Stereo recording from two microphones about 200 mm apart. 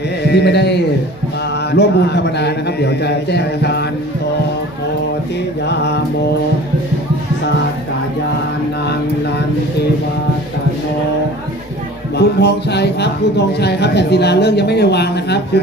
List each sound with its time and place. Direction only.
0.3 s speech: 55° left (ahead or behind)
5.6 s speech: 60° left (ahead or behind)
12.1 s speech: 55° left (ahead or behind)